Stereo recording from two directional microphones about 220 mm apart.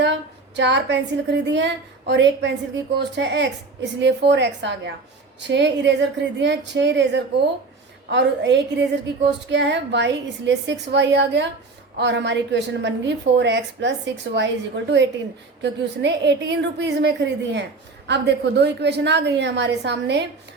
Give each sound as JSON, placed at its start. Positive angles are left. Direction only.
{"t": 0.0, "sound": "a woman's voice", "side_deg": -50}